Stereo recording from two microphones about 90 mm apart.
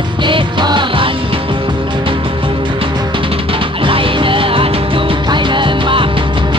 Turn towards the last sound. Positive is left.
turn(degrees=-70)  # may be behind; listen again after turning